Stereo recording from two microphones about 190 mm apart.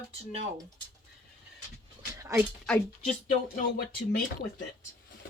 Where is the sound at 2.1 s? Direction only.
15° right (ahead or behind).